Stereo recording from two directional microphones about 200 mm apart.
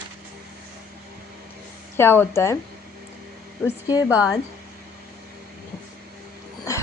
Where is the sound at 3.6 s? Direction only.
15° left (ahead or behind).